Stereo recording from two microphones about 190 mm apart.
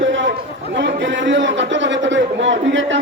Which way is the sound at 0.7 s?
70° right (ahead or behind).